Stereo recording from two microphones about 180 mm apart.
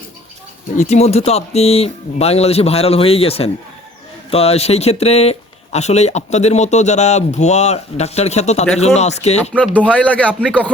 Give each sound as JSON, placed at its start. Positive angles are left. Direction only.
{"t": 0.8, "sound": "speech", "side_deg": 35}
{"t": 9.7, "sound": "a man's voice", "side_deg": 5}